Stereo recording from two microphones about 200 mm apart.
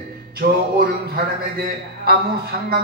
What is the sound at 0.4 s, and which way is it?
A man's voice, 50° right (ahead or behind).